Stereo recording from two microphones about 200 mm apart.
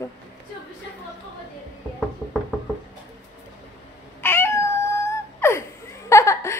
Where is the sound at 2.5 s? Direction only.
5° right (ahead or behind).